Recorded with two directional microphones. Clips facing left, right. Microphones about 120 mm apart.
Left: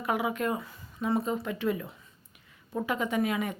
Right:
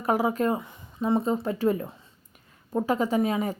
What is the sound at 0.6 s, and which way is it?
Speech, 20° right (ahead or behind).